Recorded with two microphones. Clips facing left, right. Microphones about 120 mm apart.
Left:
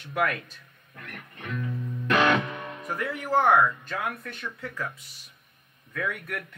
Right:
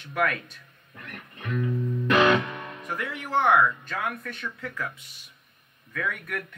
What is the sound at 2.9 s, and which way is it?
Speech, 40° left (ahead or behind).